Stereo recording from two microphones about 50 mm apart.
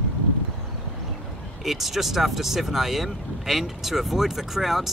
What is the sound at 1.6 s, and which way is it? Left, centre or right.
Speech, centre.